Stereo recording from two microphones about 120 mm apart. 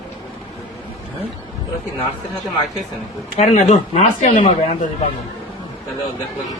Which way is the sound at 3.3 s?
65° left (ahead or behind).